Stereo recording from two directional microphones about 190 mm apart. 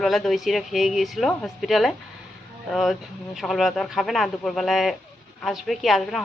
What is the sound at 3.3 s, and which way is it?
A woman's voice, centre (ahead or behind).